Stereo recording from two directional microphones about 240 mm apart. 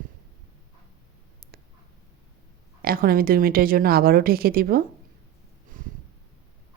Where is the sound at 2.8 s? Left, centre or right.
Right.